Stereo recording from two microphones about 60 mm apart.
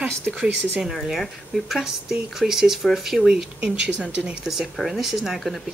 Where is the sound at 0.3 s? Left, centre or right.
Centre.